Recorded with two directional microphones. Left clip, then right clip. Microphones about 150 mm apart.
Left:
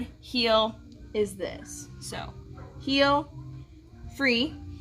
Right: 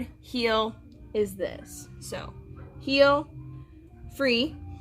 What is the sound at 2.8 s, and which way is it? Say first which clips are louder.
Speech: right 3 dB; 25° right (ahead or behind).